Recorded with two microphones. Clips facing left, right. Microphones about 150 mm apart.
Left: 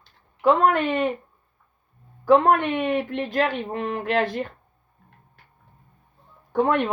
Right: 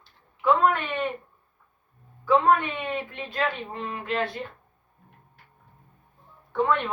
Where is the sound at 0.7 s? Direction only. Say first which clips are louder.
Left 6 dB; 40° left (ahead or behind).